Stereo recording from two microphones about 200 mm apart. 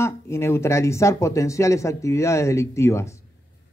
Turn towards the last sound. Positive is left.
turn(degrees=15)  # may be behind; listen again after turning